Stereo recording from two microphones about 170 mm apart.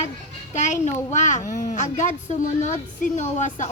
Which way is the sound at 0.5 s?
45° left (ahead or behind).